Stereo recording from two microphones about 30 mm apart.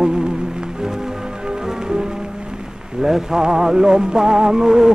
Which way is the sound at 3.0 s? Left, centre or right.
Centre.